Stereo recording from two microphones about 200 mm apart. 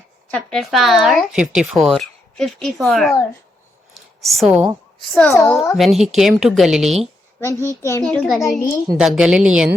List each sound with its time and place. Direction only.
0.3 s speech: centre (ahead or behind)
3.9 s a sound: centre (ahead or behind)
5.3 s a child's voice: 15° left (ahead or behind)
5.7 s speech: centre (ahead or behind)
7.3 s a child's voice: 15° left (ahead or behind); by 9.6 s 5° right (ahead or behind)